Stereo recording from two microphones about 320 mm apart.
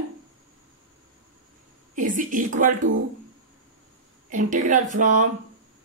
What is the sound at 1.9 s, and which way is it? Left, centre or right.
Speech, right.